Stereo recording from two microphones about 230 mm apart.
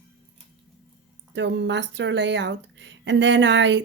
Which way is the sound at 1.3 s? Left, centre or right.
Right.